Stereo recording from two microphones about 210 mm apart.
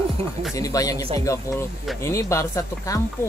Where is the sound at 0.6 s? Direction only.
15° left (ahead or behind).